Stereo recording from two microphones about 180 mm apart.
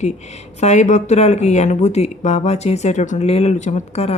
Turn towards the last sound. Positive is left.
turn(degrees=40)  # may be behind; listen again after turning